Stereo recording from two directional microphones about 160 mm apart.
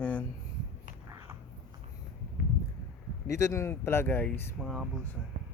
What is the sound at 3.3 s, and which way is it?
Speech, 15° left (ahead or behind).